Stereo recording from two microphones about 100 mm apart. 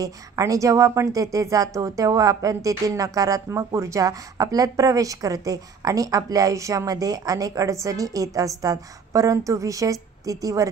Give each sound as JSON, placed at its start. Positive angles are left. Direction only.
{"t": 0.0, "sound": "speech", "side_deg": -35}